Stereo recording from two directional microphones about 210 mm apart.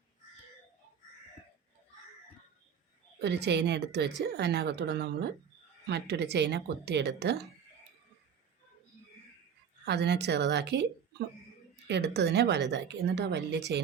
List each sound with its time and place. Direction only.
3.2 s speech: 55° right (ahead or behind)
9.8 s a woman's voice: 55° right (ahead or behind)